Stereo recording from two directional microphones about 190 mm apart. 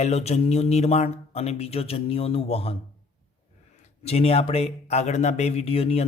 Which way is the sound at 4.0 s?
35° left (ahead or behind).